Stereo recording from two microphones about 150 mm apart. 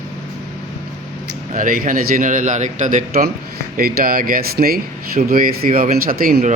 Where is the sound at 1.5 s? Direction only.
65° right (ahead or behind).